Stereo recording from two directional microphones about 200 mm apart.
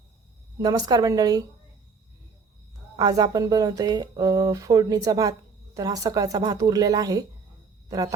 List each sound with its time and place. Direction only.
0.6 s speech: 20° right (ahead or behind)
2.9 s speech: 20° right (ahead or behind)